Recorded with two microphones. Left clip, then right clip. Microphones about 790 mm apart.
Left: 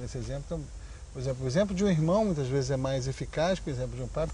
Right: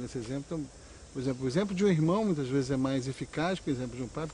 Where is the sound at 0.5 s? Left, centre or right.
Left.